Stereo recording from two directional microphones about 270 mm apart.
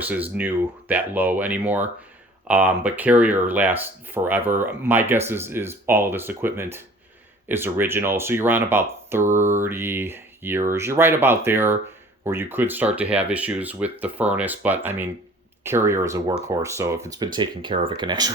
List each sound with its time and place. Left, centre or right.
0.0 s speech: centre